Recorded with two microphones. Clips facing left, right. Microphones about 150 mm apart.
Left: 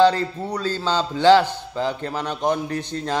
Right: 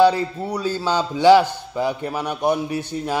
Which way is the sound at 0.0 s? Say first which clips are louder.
Right 1 dB; 10° right (ahead or behind).